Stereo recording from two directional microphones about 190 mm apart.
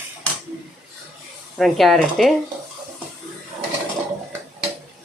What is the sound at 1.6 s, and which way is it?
Speech, centre (ahead or behind).